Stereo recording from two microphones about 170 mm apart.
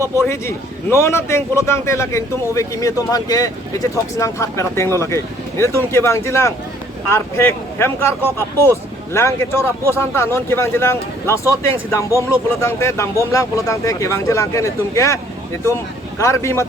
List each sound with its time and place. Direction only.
0.3 s a man's voice: 15° left (ahead or behind)